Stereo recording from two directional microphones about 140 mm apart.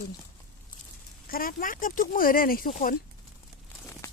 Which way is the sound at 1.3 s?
90° left.